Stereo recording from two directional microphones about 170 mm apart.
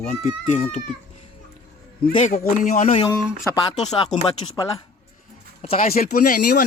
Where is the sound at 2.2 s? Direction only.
50° left (ahead or behind).